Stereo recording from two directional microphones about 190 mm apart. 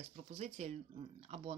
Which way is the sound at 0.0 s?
35° right (ahead or behind).